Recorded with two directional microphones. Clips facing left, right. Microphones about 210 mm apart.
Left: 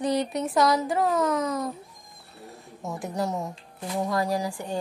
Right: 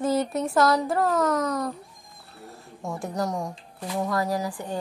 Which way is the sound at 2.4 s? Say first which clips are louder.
Right 1 dB; centre (ahead or behind).